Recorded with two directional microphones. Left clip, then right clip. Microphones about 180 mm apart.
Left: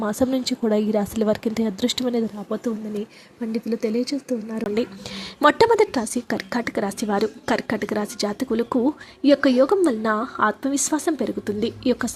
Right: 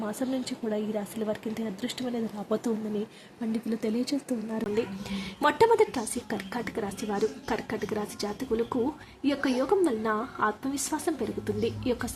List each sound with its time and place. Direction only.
0.0 s speech: 30° left (ahead or behind)
3.5 s speech: 20° left (ahead or behind)
4.7 s speech: 35° left (ahead or behind)